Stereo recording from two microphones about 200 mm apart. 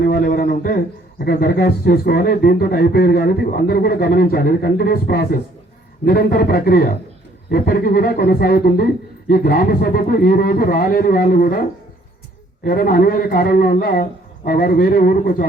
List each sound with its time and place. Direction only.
0.0 s a sound: 50° left (ahead or behind)
1.2 s a man's voice: 50° left (ahead or behind)
12.6 s a man's voice: 50° left (ahead or behind)